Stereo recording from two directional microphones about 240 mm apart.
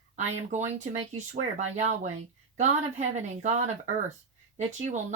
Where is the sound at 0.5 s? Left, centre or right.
Right.